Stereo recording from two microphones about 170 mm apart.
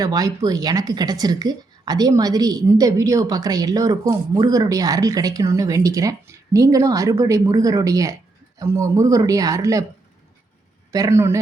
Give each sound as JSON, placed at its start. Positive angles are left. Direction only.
{"t": 0.0, "sound": "a woman's voice", "side_deg": -20}
{"t": 10.9, "sound": "speech", "side_deg": -20}